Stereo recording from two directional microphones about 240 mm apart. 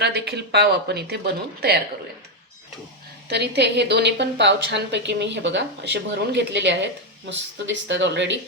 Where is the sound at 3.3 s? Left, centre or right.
Right.